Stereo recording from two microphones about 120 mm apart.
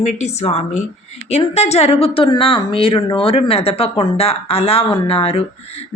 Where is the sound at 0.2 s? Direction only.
65° left (ahead or behind).